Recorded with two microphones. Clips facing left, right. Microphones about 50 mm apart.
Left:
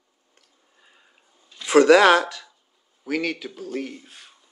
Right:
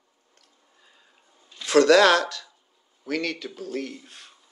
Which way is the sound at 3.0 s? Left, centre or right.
Centre.